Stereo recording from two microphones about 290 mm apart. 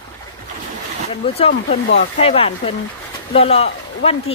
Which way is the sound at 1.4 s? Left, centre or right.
Centre.